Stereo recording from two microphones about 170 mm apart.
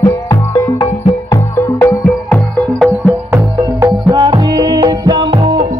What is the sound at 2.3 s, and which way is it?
Music, 5° left (ahead or behind).